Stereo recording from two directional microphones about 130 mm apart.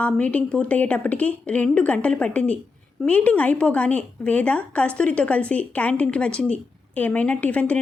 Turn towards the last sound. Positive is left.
turn(degrees=10)  # may be behind; listen again after turning